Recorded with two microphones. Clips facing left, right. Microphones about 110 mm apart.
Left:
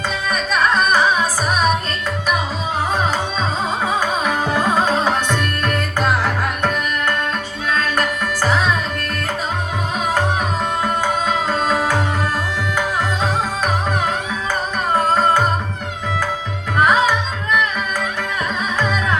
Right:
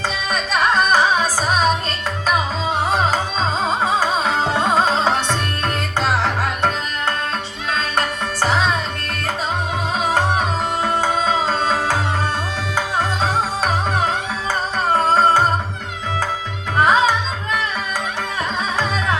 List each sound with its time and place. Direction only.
0.3 s music: 35° right (ahead or behind)
4.0 s music: 30° right (ahead or behind)
6.2 s tabla: 30° right (ahead or behind)
7.8 s music: 25° right (ahead or behind)
11.3 s music: 35° right (ahead or behind)
15.1 s music: 35° right (ahead or behind)
16.8 s music: 35° right (ahead or behind)